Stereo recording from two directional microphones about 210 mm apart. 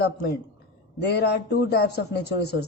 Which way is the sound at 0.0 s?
50° left (ahead or behind).